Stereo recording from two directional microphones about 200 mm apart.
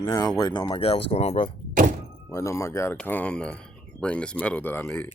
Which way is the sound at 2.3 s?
15° left (ahead or behind).